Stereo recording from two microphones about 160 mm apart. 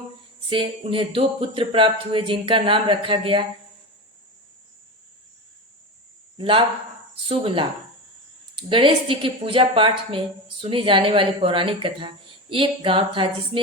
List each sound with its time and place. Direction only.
0.5 s speech: 35° right (ahead or behind)
6.3 s speech: 35° right (ahead or behind)
8.7 s speech: 30° right (ahead or behind)